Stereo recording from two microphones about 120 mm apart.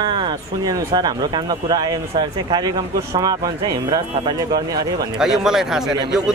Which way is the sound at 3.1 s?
30° right (ahead or behind).